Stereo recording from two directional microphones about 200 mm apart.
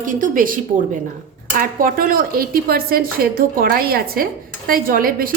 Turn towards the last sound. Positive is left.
turn(degrees=-45)  # may be behind; listen again after turning